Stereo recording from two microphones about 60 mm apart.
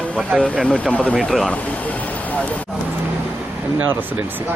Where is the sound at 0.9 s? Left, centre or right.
Left.